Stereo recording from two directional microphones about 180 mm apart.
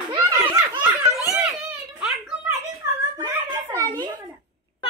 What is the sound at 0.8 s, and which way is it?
Laughter, 10° right (ahead or behind).